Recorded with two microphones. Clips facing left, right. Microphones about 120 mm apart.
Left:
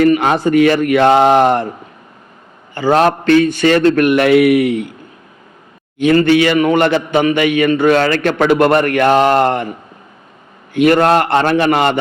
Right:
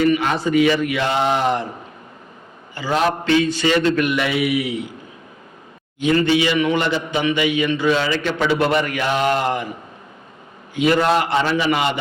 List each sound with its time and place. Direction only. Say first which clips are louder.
0.0 s a man's voice: left 6 dB; 55° left (ahead or behind)
2.7 s a man's voice: left 7 dB; 55° left (ahead or behind)
6.0 s a man's voice: left 6 dB; 60° left (ahead or behind)
10.8 s a man's voice: left 6 dB; 60° left (ahead or behind)